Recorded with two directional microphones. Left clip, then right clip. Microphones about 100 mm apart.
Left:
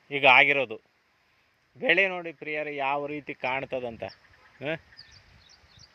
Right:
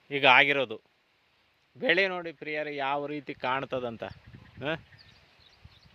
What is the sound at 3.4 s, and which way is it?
Speech, 50° right (ahead or behind).